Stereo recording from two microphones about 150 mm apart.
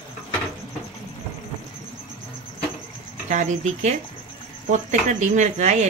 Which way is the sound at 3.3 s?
50° right (ahead or behind).